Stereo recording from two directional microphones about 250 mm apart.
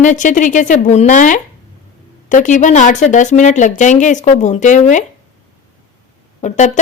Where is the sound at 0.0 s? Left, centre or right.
Left.